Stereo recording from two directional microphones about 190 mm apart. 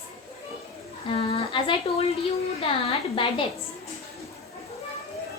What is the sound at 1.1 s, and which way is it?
Speech, 25° left (ahead or behind).